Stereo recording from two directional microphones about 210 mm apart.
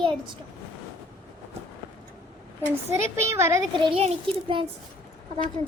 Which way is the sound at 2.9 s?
10° right (ahead or behind).